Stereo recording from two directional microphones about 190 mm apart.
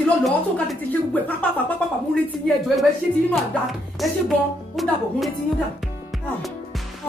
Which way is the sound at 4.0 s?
Centre (ahead or behind).